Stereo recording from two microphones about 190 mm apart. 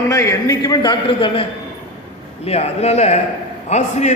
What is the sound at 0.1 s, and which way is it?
A man's voice, 15° left (ahead or behind).